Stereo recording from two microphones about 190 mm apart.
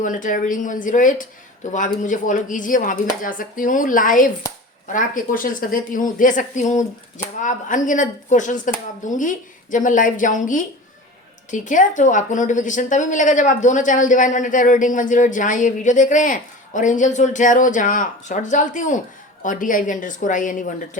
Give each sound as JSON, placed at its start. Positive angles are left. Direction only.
{"t": 0.0, "sound": "a woman's voice", "side_deg": 45}